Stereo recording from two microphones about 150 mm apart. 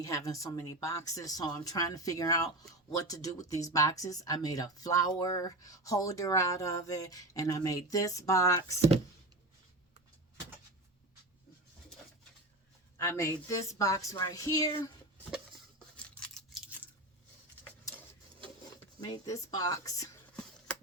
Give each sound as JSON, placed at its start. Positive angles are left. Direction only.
{"t": 0.0, "sound": "speech", "side_deg": 20}
{"t": 13.0, "sound": "speech", "side_deg": 20}
{"t": 17.6, "sound": "printer", "side_deg": 15}
{"t": 18.9, "sound": "speech", "side_deg": 25}